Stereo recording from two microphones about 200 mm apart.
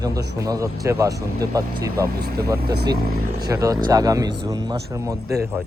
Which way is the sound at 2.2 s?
50° right (ahead or behind).